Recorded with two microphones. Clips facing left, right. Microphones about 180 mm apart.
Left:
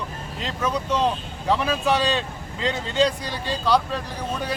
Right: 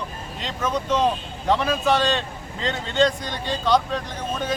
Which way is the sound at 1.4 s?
5° left (ahead or behind).